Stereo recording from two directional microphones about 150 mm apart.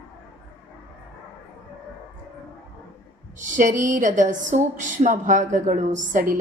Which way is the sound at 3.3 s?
60° right (ahead or behind).